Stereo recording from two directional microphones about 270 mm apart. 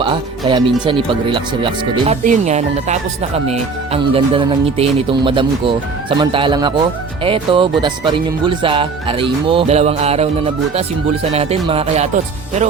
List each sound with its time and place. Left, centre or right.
0.0 s speech: centre